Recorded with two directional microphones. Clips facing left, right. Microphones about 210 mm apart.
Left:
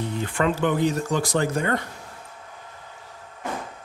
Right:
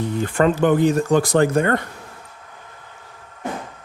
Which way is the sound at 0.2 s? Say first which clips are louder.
Right 6 dB; 45° right (ahead or behind).